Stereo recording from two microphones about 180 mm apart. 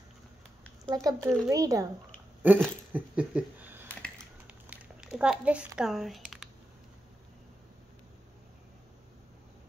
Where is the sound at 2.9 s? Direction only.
5° right (ahead or behind).